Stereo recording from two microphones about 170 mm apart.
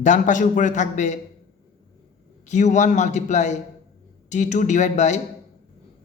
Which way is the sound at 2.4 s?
45° left (ahead or behind).